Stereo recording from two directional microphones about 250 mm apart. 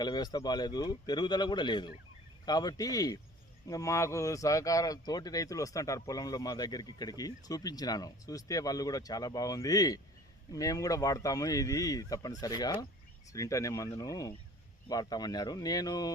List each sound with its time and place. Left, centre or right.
0.0 s speech: centre